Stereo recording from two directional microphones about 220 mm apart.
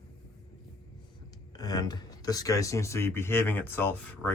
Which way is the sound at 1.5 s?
15° left (ahead or behind).